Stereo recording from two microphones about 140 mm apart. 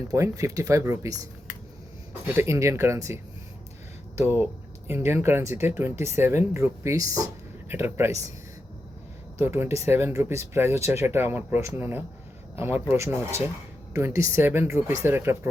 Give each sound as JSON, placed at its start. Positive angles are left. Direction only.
{"t": 0.1, "sound": "speech", "side_deg": -25}
{"t": 4.2, "sound": "speech", "side_deg": -15}
{"t": 9.4, "sound": "speech", "side_deg": -15}